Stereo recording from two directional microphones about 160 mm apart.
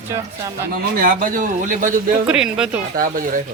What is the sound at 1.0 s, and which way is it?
Speech, 60° right (ahead or behind).